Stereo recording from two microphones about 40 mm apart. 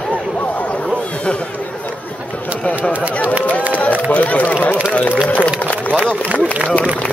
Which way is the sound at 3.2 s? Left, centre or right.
Left.